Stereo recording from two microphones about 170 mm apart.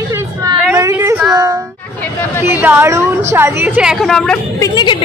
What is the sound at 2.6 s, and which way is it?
A woman's voice, 15° right (ahead or behind).